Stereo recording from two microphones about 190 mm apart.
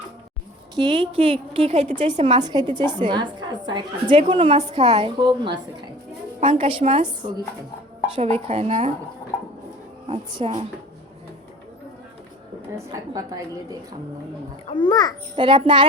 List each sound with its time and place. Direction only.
0.8 s a woman's voice: 25° right (ahead or behind)
10.1 s speech: 30° right (ahead or behind)
12.7 s a woman's voice: 20° right (ahead or behind)
14.7 s a child's voice: 25° left (ahead or behind)
15.4 s a woman's voice: 25° right (ahead or behind)